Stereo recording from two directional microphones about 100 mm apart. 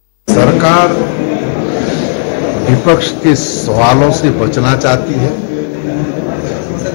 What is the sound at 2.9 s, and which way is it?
A man's voice, centre (ahead or behind).